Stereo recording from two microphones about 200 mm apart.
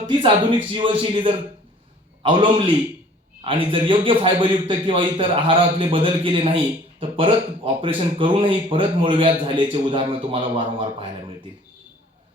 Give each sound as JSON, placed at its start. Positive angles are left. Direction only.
{"t": 0.1, "sound": "speech", "side_deg": -25}